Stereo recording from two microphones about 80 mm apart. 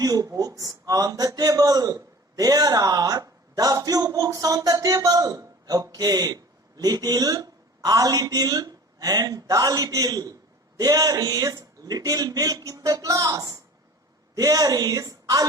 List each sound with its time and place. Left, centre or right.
0.0 s a man's voice: right